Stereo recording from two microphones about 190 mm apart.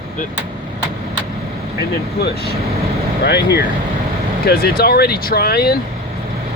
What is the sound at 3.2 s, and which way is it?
Speech, 60° left (ahead or behind).